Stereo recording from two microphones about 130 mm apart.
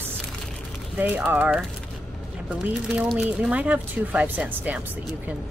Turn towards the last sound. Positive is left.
turn(degrees=-10)  # may be behind; listen again after turning